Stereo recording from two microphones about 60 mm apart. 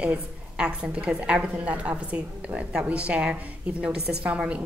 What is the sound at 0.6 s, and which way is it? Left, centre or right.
A woman's voice, centre.